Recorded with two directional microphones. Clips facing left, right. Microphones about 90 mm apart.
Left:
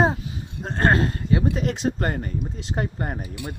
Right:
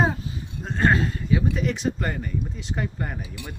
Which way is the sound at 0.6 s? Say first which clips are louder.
Left 1 dB; 50° left (ahead or behind).